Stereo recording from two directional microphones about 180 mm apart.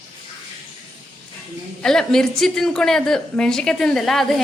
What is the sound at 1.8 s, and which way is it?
A woman's voice, 5° left (ahead or behind).